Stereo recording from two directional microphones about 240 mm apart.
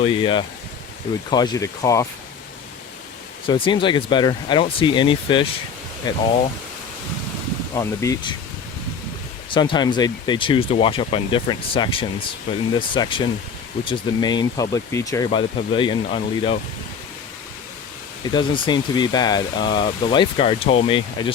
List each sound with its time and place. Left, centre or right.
0.0 s speech: left
3.4 s speech: centre
7.8 s speech: centre
9.6 s speech: centre
18.3 s speech: centre